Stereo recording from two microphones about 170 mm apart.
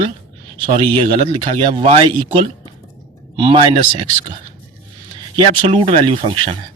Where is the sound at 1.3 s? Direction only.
30° right (ahead or behind).